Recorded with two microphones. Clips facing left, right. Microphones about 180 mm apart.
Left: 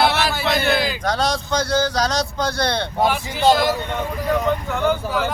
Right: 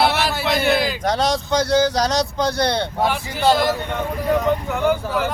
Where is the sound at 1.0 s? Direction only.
20° right (ahead or behind).